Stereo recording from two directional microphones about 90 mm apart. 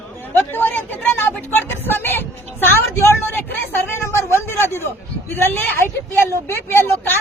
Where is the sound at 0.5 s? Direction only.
20° left (ahead or behind).